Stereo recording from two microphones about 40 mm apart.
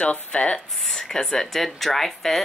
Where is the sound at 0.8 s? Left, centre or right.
Centre.